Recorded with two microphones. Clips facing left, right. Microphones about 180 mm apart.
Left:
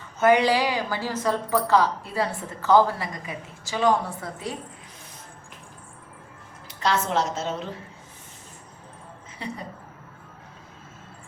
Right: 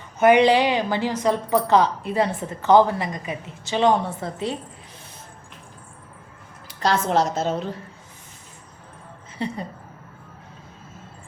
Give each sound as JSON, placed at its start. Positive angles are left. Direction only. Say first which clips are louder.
{"t": 0.2, "sound": "a woman's voice", "louder": "right 4 dB", "side_deg": -20}
{"t": 7.1, "sound": "a woman's voice", "louder": "right 5 dB", "side_deg": -40}
{"t": 9.4, "sound": "a woman's voice", "louder": "right 6 dB", "side_deg": -30}